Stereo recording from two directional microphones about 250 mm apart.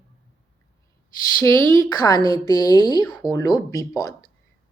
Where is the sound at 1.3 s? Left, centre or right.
Centre.